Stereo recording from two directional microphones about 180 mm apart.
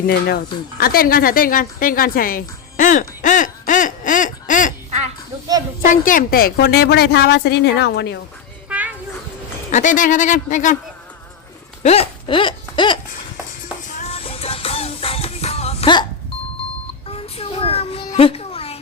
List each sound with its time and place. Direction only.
0.1 s a woman's voice: 60° left (ahead or behind)
5.8 s a woman's voice: 50° left (ahead or behind); by 8.2 s 70° left (ahead or behind)
8.7 s children playing: 5° right (ahead or behind)
9.7 s speech: 45° left (ahead or behind)
11.8 s a sound: 35° left (ahead or behind)
13.8 s music: 40° left (ahead or behind)
17.1 s a sound: 35° left (ahead or behind)